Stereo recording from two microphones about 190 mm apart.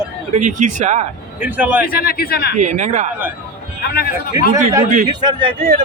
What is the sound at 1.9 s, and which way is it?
Speech, 50° left (ahead or behind).